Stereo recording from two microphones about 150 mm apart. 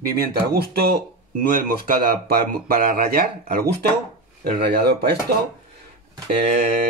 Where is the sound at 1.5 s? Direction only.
70° right (ahead or behind).